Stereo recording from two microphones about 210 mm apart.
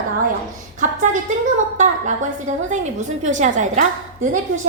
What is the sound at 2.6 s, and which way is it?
A woman's voice, 35° right (ahead or behind).